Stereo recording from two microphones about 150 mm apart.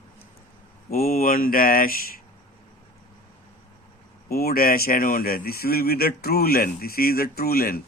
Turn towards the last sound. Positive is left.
turn(degrees=85)